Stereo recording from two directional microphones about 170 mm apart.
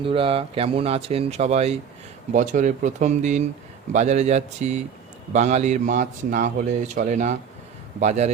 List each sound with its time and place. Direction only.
0.0 s a man's voice: 30° right (ahead or behind)